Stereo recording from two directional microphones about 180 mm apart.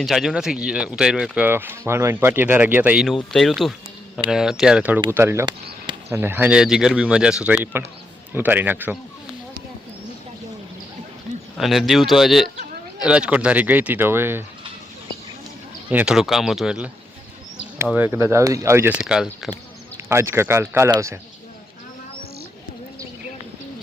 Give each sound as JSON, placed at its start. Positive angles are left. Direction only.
{"t": 0.0, "sound": "speech", "side_deg": 0}
{"t": 11.5, "sound": "speech", "side_deg": 0}
{"t": 15.9, "sound": "speech", "side_deg": -5}
{"t": 20.1, "sound": "speech", "side_deg": -15}